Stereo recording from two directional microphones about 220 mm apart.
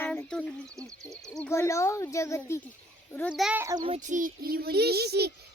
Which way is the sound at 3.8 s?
35° right (ahead or behind).